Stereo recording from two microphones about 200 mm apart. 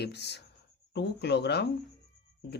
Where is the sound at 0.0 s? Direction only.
55° left (ahead or behind).